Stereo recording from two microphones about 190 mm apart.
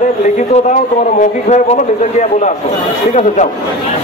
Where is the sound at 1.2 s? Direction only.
35° left (ahead or behind).